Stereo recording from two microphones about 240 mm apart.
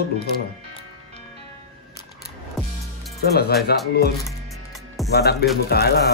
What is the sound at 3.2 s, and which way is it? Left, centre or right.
Speech, left.